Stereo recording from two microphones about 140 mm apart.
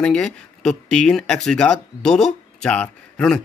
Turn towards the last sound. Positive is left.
turn(degrees=5)  # may be behind; listen again after turning